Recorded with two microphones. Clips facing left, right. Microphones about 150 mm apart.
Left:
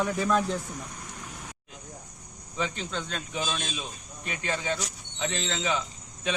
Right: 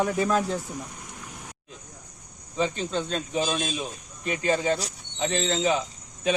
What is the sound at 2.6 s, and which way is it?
Speech, 35° right (ahead or behind).